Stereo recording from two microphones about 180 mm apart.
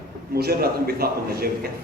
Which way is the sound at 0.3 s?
60° right (ahead or behind).